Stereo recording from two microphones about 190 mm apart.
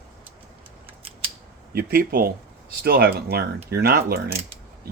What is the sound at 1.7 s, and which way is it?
Speech, 55° right (ahead or behind).